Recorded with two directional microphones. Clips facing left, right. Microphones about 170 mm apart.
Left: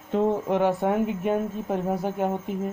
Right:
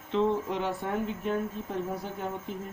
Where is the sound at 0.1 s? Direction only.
50° left (ahead or behind).